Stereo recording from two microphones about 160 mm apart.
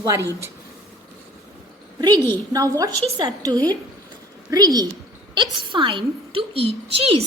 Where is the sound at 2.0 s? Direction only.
25° right (ahead or behind).